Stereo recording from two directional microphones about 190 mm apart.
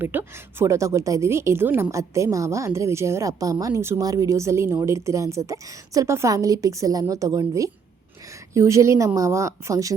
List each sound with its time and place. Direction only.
0.0 s a woman's voice: 10° right (ahead or behind)